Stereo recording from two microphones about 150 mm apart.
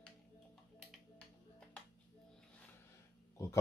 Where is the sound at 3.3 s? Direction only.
20° left (ahead or behind).